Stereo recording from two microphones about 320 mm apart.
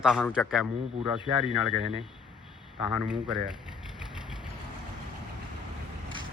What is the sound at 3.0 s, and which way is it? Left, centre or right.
Speech, centre.